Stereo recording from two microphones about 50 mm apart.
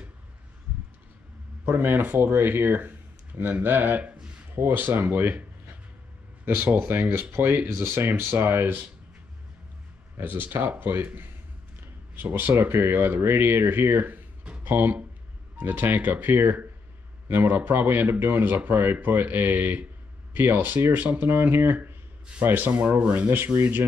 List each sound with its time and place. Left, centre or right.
1.8 s speech: right
10.1 s speech: right
11.8 s a sound: right
12.6 s speech: right
23.3 s speech: right